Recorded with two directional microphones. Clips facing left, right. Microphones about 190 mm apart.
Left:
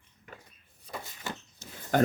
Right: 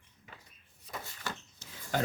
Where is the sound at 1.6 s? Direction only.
50° left (ahead or behind).